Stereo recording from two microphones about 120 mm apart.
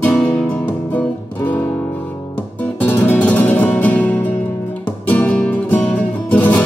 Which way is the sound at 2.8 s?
15° left (ahead or behind).